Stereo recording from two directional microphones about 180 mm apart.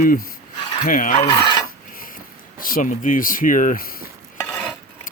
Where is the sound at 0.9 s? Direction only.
50° left (ahead or behind).